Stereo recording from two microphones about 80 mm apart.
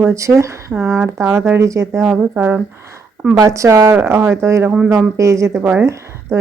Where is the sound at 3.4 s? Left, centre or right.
Right.